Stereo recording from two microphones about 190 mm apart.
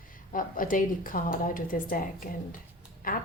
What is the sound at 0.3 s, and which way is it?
A woman's voice, 45° left (ahead or behind).